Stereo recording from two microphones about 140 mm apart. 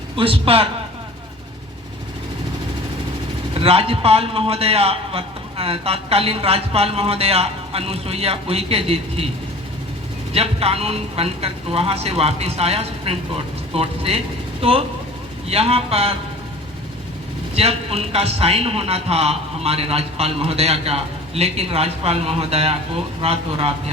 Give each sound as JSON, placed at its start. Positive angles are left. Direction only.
{"t": 0.2, "sound": "a man's voice", "side_deg": -40}
{"t": 3.5, "sound": "a man's voice", "side_deg": -45}
{"t": 10.3, "sound": "a man's voice", "side_deg": -45}
{"t": 17.5, "sound": "a man's voice", "side_deg": -45}